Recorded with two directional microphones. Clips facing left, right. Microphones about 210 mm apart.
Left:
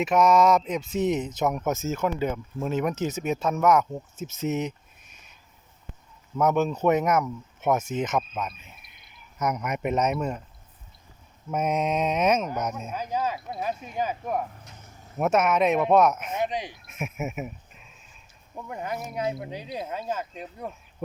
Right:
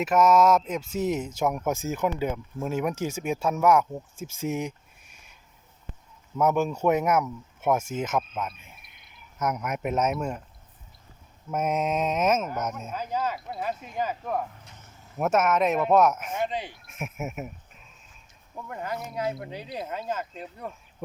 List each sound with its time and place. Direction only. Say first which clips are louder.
0.0 s speech: even; 5° right (ahead or behind)
6.3 s speech: left 1 dB; 5° right (ahead or behind)
11.5 s speech: left 1 dB; 5° right (ahead or behind)
12.9 s speech: even; 10° left (ahead or behind)
15.2 s speech: left 1 dB; 5° right (ahead or behind)
16.3 s speech: left 1 dB; 15° left (ahead or behind)
18.5 s speech: left 1 dB; 15° left (ahead or behind)